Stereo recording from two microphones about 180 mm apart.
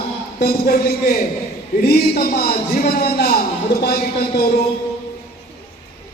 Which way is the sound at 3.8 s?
60° left (ahead or behind).